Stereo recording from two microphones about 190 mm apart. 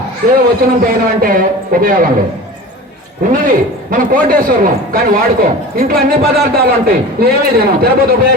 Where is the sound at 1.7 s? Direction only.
45° right (ahead or behind).